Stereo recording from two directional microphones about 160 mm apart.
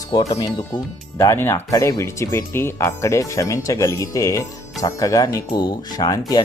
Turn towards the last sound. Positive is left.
turn(degrees=25)  # may be behind; listen again after turning